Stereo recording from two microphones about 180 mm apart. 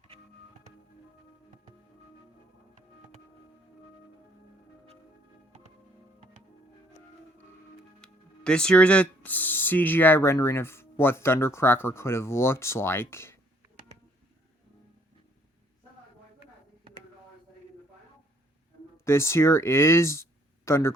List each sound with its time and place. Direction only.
8.0 s speech: 5° left (ahead or behind)
19.0 s speech: 15° left (ahead or behind)